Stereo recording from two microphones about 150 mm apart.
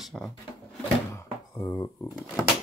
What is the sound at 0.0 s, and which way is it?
Speech, centre (ahead or behind).